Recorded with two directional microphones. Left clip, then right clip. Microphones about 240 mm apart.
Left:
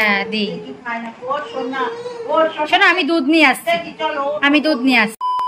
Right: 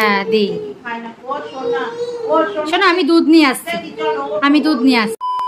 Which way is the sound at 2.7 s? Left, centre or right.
Centre.